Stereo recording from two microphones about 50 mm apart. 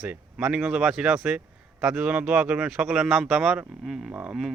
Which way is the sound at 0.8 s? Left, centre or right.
Centre.